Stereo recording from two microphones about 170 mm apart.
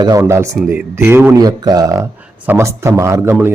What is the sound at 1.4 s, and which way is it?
Speech, 20° right (ahead or behind).